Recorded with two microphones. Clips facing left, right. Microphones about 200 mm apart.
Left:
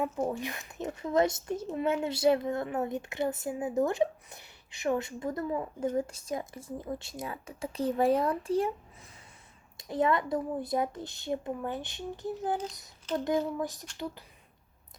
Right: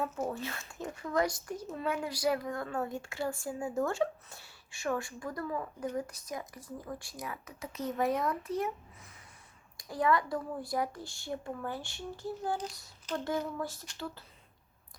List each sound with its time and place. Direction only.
0.0 s speech: 15° left (ahead or behind)
9.7 s speech: 25° left (ahead or behind)